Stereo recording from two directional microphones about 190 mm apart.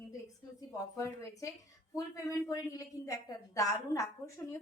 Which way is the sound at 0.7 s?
15° left (ahead or behind).